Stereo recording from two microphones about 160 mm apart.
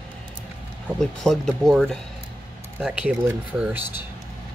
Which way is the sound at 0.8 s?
Centre (ahead or behind).